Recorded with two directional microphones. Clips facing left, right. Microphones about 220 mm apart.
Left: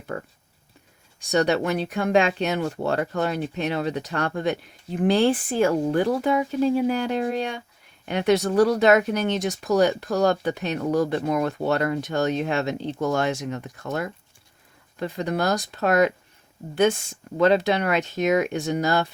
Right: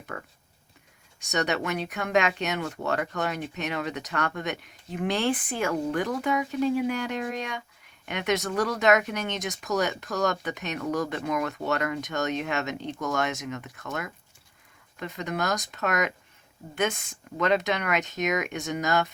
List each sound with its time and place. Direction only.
0.1 s speech: 35° left (ahead or behind)